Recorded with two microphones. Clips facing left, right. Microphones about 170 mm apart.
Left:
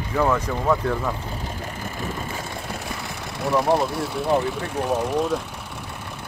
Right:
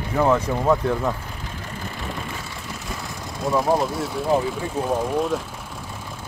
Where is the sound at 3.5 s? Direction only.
Centre (ahead or behind).